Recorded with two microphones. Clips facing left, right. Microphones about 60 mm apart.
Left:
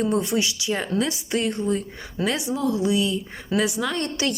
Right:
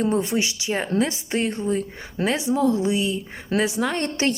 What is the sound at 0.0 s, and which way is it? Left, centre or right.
Speech, right.